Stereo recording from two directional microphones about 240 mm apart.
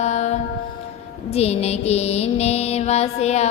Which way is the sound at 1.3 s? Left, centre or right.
Left.